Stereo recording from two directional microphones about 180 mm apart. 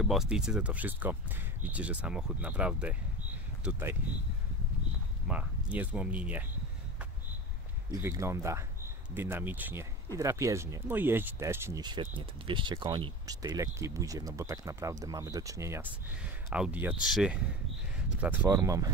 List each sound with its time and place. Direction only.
0.0 s speech: centre (ahead or behind)
5.3 s speech: 5° right (ahead or behind)
7.9 s speech: 15° right (ahead or behind)
16.4 s speech: 5° right (ahead or behind)
18.5 s speech: 20° right (ahead or behind)